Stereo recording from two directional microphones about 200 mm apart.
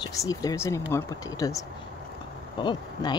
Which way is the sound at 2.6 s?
20° left (ahead or behind).